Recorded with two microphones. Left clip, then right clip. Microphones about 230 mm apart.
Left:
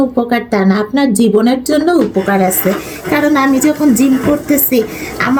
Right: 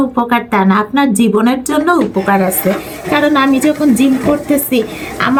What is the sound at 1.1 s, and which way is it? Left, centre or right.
A woman's voice, centre.